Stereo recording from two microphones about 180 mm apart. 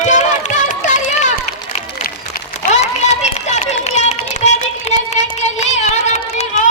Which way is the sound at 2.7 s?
40° left (ahead or behind).